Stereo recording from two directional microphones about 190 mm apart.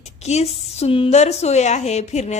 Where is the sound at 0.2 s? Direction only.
35° left (ahead or behind).